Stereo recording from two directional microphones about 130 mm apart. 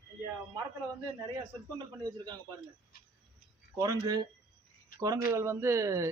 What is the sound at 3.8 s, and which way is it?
A man's voice, 30° right (ahead or behind).